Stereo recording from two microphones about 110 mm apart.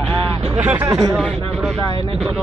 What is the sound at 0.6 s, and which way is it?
Speech, 20° right (ahead or behind).